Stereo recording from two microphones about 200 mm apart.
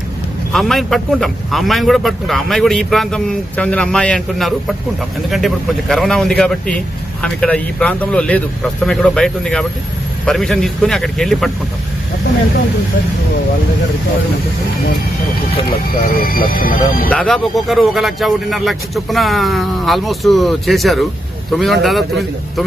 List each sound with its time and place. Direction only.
0.5 s a man's voice: centre (ahead or behind)
16.0 s speech: 45° left (ahead or behind)
17.1 s a man's voice: centre (ahead or behind)